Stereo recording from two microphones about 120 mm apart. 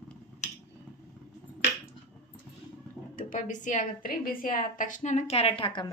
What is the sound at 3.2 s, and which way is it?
A woman's voice, 90° left.